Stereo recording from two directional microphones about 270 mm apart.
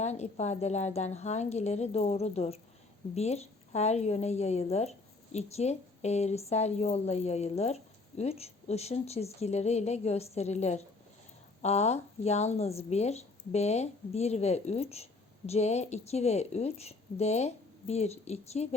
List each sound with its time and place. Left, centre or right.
0.0 s a woman's voice: left